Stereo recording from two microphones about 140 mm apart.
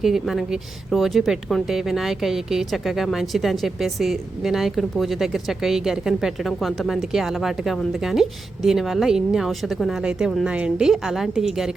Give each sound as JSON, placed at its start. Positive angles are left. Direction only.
{"t": 0.0, "sound": "a woman's voice", "side_deg": 0}